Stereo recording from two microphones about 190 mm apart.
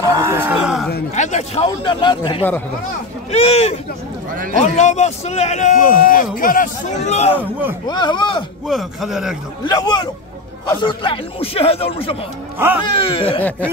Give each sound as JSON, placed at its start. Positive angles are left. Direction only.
{"t": 0.0, "sound": "speech", "side_deg": -15}
{"t": 1.1, "sound": "a man's voice", "side_deg": 40}
{"t": 4.7, "sound": "a man's voice", "side_deg": 35}
{"t": 7.8, "sound": "speech", "side_deg": 25}
{"t": 8.6, "sound": "a man's voice", "side_deg": 0}
{"t": 9.7, "sound": "speech", "side_deg": 20}
{"t": 13.4, "sound": "a sound", "side_deg": 10}